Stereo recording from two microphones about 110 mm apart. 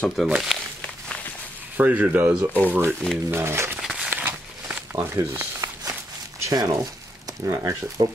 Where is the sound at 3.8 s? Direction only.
5° right (ahead or behind).